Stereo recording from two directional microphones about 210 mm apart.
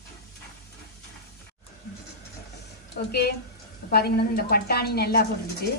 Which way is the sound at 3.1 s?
50° left (ahead or behind).